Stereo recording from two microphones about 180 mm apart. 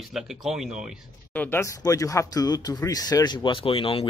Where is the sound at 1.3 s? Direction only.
10° left (ahead or behind).